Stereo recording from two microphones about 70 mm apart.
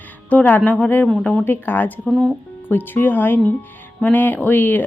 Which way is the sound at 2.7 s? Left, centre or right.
Left.